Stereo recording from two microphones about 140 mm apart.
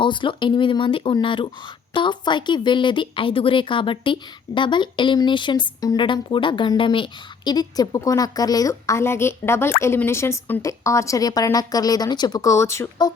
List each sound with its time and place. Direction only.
0.0 s a woman's voice: 35° left (ahead or behind); by 13.1 s 20° left (ahead or behind)